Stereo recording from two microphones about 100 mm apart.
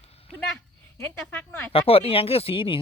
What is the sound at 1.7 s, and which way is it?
Speech, 75° left (ahead or behind).